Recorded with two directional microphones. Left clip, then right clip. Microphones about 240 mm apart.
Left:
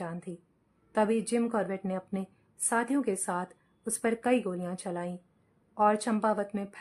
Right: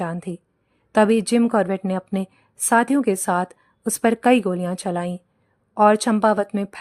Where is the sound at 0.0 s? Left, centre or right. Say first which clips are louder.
Right 11 dB; right.